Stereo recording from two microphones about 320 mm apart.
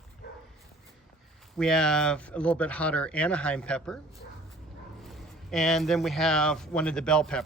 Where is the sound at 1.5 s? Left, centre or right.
Centre.